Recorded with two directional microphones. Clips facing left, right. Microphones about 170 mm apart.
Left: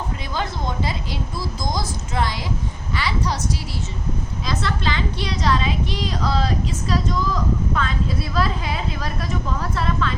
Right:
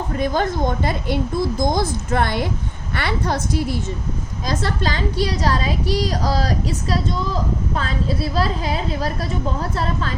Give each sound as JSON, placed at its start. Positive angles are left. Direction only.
{"t": 0.2, "sound": "speech", "side_deg": -50}
{"t": 4.4, "sound": "a woman's voice", "side_deg": -40}